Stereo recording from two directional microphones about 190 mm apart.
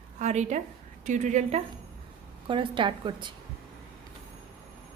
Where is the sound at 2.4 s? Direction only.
25° right (ahead or behind).